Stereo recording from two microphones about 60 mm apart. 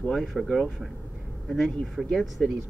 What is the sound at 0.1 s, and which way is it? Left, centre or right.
Speech, centre.